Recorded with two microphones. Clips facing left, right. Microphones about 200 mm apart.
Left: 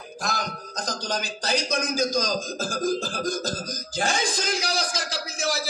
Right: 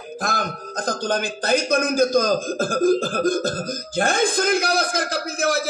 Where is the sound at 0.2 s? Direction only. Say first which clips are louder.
Right 4 dB; 55° right (ahead or behind).